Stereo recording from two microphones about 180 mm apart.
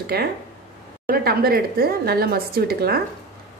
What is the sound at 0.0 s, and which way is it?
A woman's voice, 60° right (ahead or behind).